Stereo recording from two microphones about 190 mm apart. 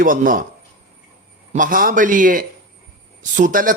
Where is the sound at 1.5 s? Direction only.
45° right (ahead or behind).